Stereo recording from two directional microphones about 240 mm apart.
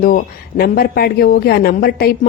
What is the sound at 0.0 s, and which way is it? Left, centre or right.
A man's voice, left.